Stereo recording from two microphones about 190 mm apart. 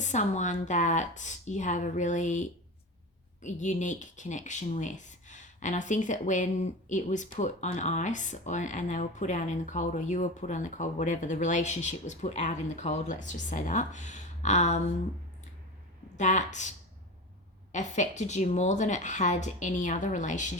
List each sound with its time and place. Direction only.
0.0 s speech: 40° left (ahead or behind)
3.4 s speech: 40° left (ahead or behind)
16.1 s speech: 40° left (ahead or behind)